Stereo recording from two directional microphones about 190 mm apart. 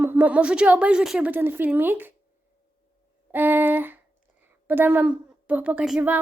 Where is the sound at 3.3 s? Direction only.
10° right (ahead or behind).